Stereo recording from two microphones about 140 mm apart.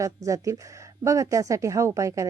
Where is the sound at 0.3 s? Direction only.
25° right (ahead or behind).